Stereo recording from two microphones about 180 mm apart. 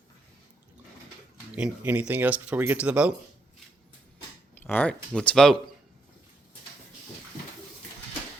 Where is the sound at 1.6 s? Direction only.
5° right (ahead or behind).